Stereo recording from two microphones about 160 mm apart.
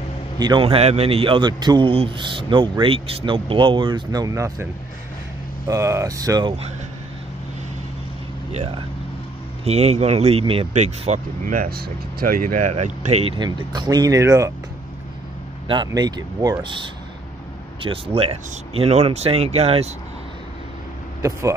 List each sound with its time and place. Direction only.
0.4 s a man's voice: 30° right (ahead or behind)
5.7 s speech: 20° right (ahead or behind)
9.7 s a man's voice: 40° right (ahead or behind)
10.7 s speech: 45° right (ahead or behind)
13.4 s speech: 25° right (ahead or behind)
15.7 s a man's voice: 25° right (ahead or behind)
21.2 s speech: 20° right (ahead or behind)